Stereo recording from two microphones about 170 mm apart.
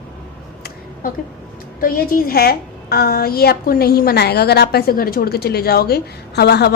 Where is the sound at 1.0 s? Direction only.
55° left (ahead or behind).